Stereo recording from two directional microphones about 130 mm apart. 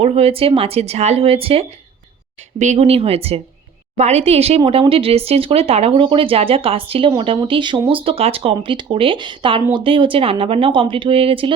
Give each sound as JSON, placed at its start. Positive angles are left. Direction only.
{"t": 0.0, "sound": "speech", "side_deg": -50}
{"t": 2.6, "sound": "speech", "side_deg": -65}